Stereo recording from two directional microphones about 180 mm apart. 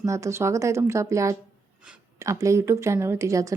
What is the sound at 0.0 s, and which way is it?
Speech, 15° right (ahead or behind).